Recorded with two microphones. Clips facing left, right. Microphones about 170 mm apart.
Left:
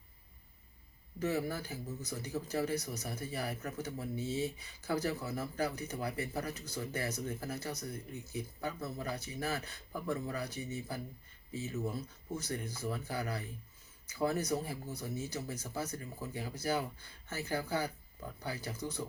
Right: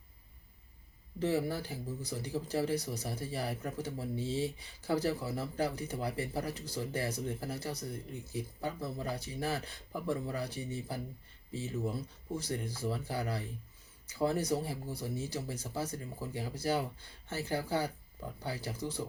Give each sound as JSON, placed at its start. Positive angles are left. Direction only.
{"t": 1.2, "sound": "speech", "side_deg": -30}
{"t": 11.9, "sound": "speech", "side_deg": -30}